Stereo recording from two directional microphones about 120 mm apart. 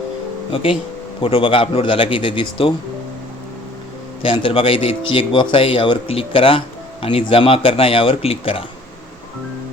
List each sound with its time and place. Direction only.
0.5 s speech: 50° left (ahead or behind)
4.2 s speech: 50° left (ahead or behind)